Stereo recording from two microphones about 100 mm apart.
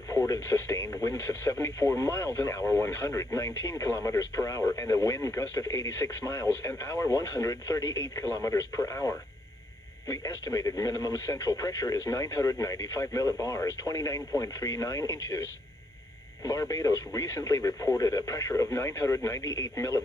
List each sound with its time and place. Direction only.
0.3 s speech: 30° left (ahead or behind)
16.4 s speech: 35° left (ahead or behind)